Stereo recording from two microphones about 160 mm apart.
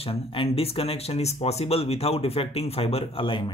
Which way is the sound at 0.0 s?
35° left (ahead or behind).